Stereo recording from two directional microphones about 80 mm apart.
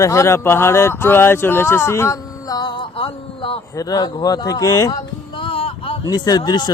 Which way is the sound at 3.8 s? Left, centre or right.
Left.